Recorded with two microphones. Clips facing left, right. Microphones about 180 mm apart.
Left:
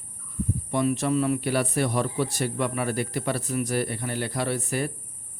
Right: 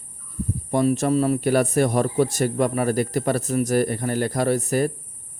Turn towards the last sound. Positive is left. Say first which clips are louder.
# right 7 dB
turn(degrees=-40)  # may be behind; listen again after turning